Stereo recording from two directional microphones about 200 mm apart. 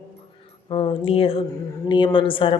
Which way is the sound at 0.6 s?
30° left (ahead or behind).